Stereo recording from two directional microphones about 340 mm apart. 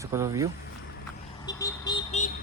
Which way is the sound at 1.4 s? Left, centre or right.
Centre.